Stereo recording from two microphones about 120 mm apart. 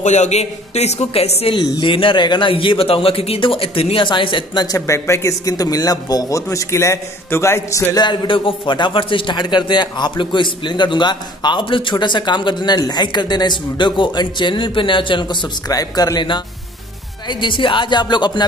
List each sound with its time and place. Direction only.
0.0 s speech: 75° left (ahead or behind); by 1.5 s 60° left (ahead or behind)
1.5 s a man's voice: 45° left (ahead or behind)